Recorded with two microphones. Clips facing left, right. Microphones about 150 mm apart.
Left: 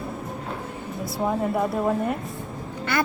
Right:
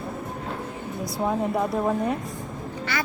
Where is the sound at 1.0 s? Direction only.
Centre (ahead or behind).